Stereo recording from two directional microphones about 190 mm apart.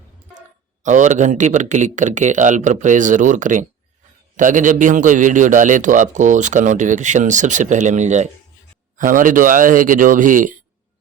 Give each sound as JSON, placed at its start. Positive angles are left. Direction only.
{"t": 0.3, "sound": "a man's voice", "side_deg": -40}